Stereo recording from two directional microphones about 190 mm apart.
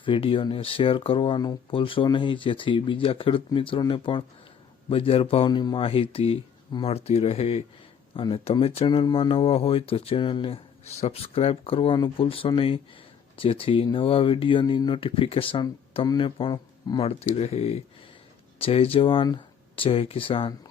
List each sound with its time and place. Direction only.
0.0 s speech: 25° left (ahead or behind)